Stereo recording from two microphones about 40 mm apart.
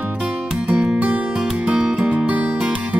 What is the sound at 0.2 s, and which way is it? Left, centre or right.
Music, right.